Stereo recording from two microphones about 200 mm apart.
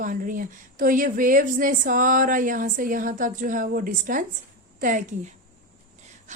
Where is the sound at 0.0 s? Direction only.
40° right (ahead or behind).